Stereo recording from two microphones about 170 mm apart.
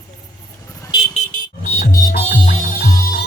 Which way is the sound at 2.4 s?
50° left (ahead or behind).